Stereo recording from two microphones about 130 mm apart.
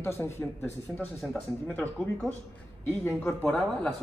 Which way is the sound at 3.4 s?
5° left (ahead or behind).